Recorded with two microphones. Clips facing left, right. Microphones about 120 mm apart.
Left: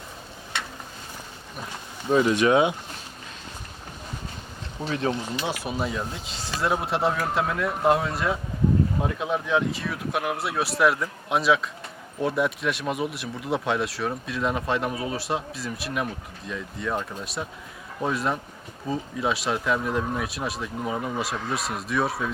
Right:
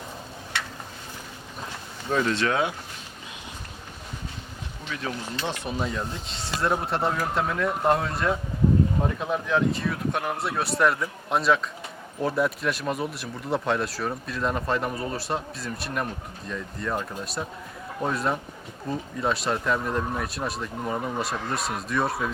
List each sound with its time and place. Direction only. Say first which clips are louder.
2.0 s speech: left 5 dB; 15° left (ahead or behind)
4.9 s speech: left 7 dB; 30° left (ahead or behind)
5.4 s speech: left 1 dB; 5° left (ahead or behind)